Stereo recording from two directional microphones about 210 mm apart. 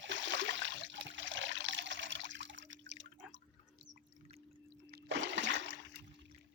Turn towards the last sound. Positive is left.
turn(degrees=-55)  # may be behind; listen again after turning